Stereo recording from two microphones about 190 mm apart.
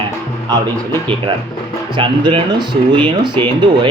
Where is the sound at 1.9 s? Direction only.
25° right (ahead or behind).